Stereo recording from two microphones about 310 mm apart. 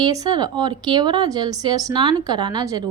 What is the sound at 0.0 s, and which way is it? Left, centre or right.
A woman's voice, centre.